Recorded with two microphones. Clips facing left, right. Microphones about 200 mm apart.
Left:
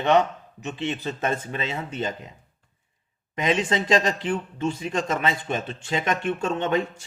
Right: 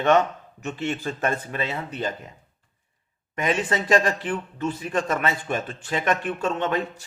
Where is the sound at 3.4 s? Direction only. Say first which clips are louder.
Left 1 dB; 25° left (ahead or behind).